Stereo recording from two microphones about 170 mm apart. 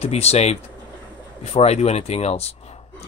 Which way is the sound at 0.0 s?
40° left (ahead or behind).